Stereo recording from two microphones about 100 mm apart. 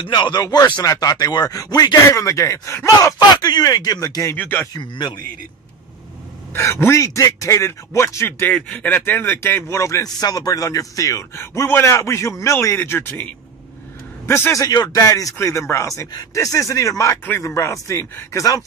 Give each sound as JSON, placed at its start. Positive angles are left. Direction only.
{"t": 0.1, "sound": "speech", "side_deg": 45}
{"t": 3.2, "sound": "speech", "side_deg": 45}
{"t": 4.4, "sound": "speech", "side_deg": 20}
{"t": 4.7, "sound": "a man's voice", "side_deg": 50}
{"t": 6.5, "sound": "speech", "side_deg": 25}
{"t": 8.5, "sound": "speech", "side_deg": 10}